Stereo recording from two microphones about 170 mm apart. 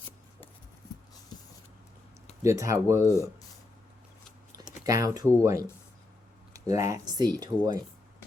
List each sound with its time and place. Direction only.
2.4 s speech: 15° right (ahead or behind)
3.0 s speech: 15° left (ahead or behind)
4.5 s typing: 20° right (ahead or behind)
4.9 s speech: 20° right (ahead or behind)